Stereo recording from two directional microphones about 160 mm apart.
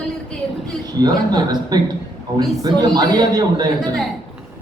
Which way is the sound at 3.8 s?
Centre (ahead or behind).